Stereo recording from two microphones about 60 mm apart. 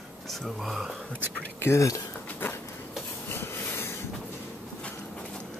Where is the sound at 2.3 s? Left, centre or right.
Left.